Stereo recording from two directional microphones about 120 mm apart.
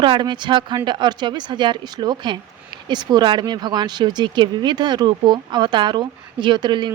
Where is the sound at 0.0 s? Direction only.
40° right (ahead or behind).